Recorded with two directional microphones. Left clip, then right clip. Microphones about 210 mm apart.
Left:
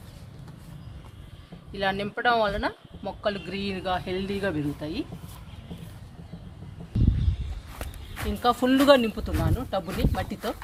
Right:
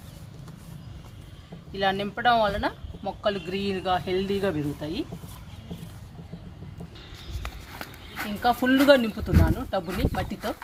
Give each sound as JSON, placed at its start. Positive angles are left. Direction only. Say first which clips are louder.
{"t": 1.7, "sound": "speech", "louder": "right 2 dB", "side_deg": 30}
{"t": 8.1, "sound": "speech", "louder": "even", "side_deg": 15}